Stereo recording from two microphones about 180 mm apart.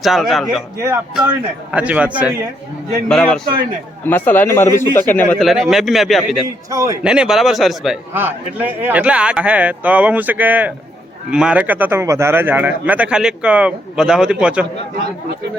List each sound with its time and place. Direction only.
0.0 s speech: centre (ahead or behind)
1.7 s speech: 5° right (ahead or behind)
3.1 s a man's voice: 5° left (ahead or behind)
6.7 s a man's voice: 20° right (ahead or behind)
7.0 s speech: 5° right (ahead or behind)